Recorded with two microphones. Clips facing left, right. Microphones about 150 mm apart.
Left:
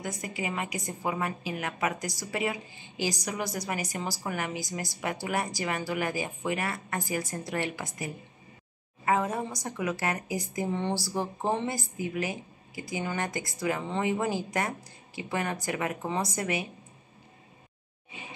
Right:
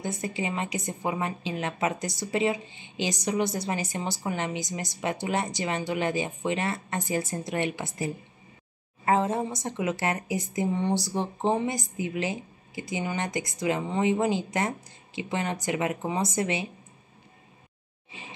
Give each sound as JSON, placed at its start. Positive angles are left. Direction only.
{"t": 0.0, "sound": "a woman's voice", "side_deg": -25}